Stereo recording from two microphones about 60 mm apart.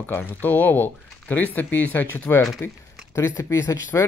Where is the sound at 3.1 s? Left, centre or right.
Left.